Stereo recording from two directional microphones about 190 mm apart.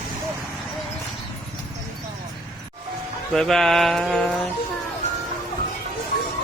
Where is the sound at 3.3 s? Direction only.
Centre (ahead or behind).